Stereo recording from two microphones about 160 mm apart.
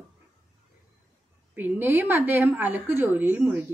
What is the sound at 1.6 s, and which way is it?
A woman's voice, 15° right (ahead or behind).